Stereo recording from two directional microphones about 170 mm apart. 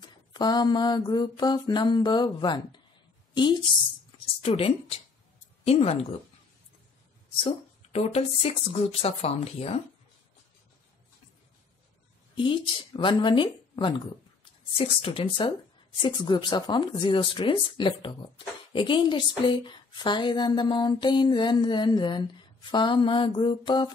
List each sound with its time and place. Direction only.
0.3 s speech: 25° left (ahead or behind)
7.4 s speech: 35° left (ahead or behind)
12.4 s speech: 30° left (ahead or behind)